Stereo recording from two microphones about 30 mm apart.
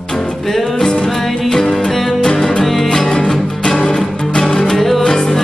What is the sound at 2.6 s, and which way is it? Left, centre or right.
Music, centre.